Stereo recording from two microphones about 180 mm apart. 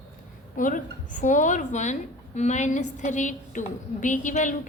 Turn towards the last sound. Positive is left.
turn(degrees=45)  # may be behind; listen again after turning